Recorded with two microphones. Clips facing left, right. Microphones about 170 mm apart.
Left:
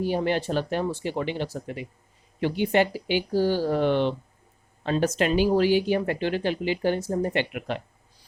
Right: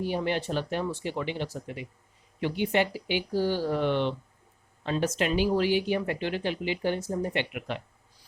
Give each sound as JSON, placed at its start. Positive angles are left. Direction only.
{"t": 0.0, "sound": "speech", "side_deg": 35}